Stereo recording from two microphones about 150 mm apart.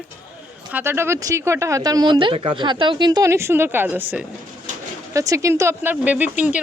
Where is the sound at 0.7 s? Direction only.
15° right (ahead or behind).